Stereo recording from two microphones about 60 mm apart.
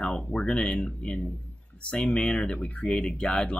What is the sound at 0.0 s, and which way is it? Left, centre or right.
Speech, centre.